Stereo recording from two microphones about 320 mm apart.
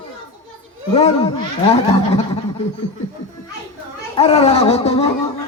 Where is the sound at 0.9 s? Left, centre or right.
Centre.